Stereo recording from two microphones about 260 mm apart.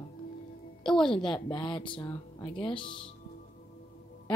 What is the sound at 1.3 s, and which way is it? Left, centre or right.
Speech, centre.